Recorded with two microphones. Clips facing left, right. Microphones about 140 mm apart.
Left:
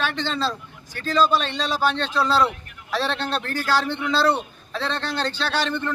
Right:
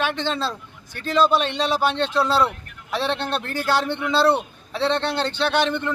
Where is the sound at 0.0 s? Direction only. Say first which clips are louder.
Right 1 dB; 15° right (ahead or behind).